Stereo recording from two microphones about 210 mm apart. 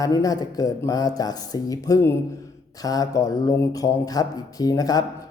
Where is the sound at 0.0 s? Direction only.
15° left (ahead or behind).